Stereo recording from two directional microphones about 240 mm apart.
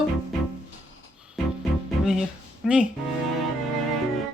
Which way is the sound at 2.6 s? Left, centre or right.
Centre.